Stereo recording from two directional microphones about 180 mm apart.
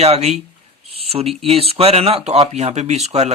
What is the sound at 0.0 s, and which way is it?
Speech, 35° right (ahead or behind).